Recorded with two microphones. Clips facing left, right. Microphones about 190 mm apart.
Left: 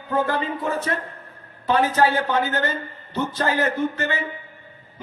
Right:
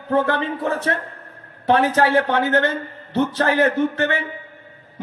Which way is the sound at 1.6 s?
70° right (ahead or behind).